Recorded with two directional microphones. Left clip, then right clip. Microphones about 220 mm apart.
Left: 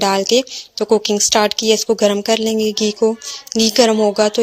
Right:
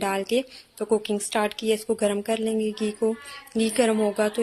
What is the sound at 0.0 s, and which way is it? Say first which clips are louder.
Speech: left 10 dB; 35° left (ahead or behind).